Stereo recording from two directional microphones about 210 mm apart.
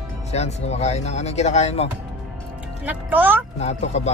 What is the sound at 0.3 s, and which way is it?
Speech, 30° left (ahead or behind).